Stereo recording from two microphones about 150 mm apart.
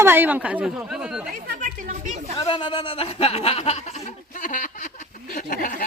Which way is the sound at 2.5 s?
35° left (ahead or behind).